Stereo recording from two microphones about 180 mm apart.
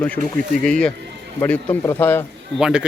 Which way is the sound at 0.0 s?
5° left (ahead or behind).